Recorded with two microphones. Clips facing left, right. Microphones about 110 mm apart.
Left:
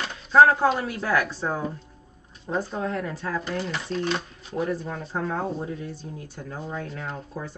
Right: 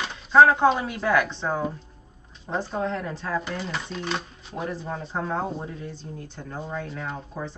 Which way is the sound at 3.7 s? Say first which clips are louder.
Left 3 dB; centre (ahead or behind).